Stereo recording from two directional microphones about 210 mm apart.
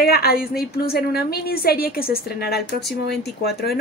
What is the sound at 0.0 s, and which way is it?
A woman's voice, 45° left (ahead or behind).